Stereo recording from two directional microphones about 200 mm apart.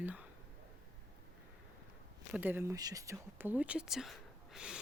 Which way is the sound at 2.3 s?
10° right (ahead or behind).